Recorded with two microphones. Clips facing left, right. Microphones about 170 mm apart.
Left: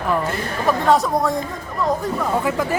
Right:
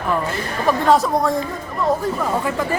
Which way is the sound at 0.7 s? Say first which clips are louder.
Right 1 dB; centre (ahead or behind).